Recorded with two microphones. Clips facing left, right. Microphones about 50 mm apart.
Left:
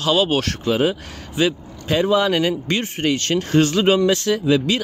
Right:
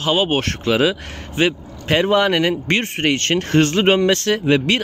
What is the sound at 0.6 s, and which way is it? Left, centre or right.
Speech, right.